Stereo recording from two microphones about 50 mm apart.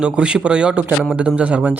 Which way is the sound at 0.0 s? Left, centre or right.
Centre.